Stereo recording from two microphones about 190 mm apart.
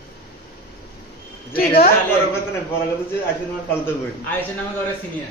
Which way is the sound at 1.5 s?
40° left (ahead or behind).